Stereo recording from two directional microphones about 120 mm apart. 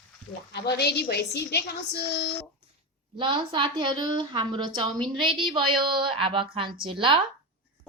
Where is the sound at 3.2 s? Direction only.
40° right (ahead or behind).